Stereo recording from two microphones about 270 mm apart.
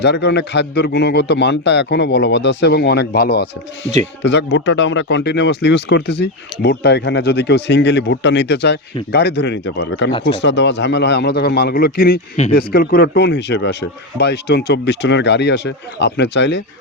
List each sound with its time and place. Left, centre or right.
0.0 s speech: left